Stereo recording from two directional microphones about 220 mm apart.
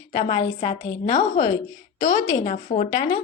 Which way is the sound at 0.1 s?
20° left (ahead or behind).